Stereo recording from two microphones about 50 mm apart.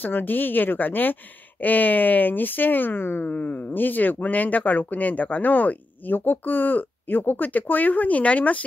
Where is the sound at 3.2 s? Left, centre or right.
Left.